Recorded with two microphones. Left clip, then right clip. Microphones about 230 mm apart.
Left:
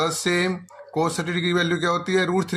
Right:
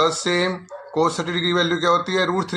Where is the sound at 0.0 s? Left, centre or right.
Left.